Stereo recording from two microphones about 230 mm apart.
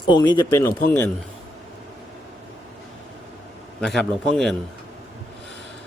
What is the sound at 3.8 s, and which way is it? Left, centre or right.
Speech, centre.